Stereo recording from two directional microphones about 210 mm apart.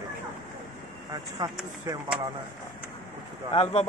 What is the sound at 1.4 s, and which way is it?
Speech, 20° right (ahead or behind).